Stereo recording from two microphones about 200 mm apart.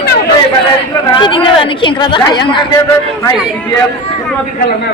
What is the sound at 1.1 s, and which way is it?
A woman's voice, 25° left (ahead or behind).